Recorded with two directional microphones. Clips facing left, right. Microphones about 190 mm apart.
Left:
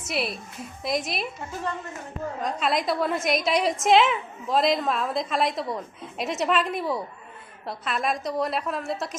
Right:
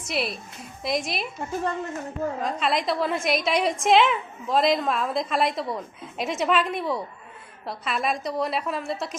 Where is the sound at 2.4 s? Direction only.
Centre (ahead or behind).